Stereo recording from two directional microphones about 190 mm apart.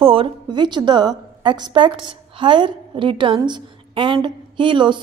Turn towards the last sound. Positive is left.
turn(degrees=-25)  # may be behind; listen again after turning